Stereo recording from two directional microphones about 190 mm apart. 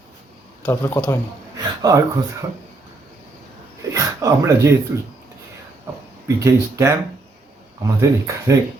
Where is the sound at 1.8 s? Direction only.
20° right (ahead or behind).